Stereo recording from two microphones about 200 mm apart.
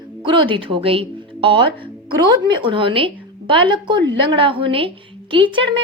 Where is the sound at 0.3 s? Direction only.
25° right (ahead or behind).